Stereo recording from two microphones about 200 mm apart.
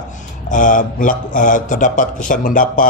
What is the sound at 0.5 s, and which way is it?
A man's voice, 40° left (ahead or behind).